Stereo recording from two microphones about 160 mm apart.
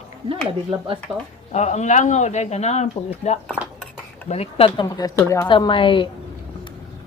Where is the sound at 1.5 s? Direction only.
45° left (ahead or behind).